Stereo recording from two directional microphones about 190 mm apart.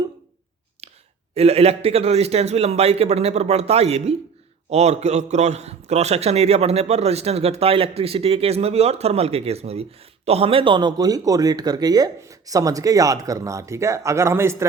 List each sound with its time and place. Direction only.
1.4 s a man's voice: 30° right (ahead or behind); by 14.7 s 15° right (ahead or behind)